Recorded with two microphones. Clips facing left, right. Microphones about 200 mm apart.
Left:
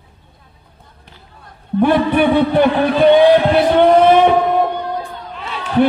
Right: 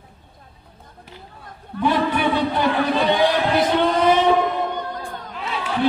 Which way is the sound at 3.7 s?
55° left (ahead or behind).